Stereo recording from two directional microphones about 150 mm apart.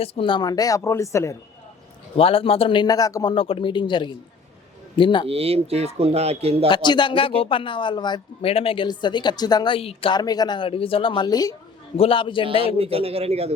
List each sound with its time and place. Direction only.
0.0 s speech: 40° left (ahead or behind); by 1.4 s 20° left (ahead or behind)
2.1 s speech: 40° left (ahead or behind)
3.3 s speech: 35° left (ahead or behind)
5.3 s speech: 40° right (ahead or behind)
6.7 s speech: 30° left (ahead or behind)
11.9 s speech: 35° left (ahead or behind)
12.6 s a man's voice: 40° right (ahead or behind)